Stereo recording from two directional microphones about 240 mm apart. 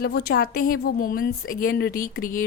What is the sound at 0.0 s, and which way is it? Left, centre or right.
A woman's voice, left.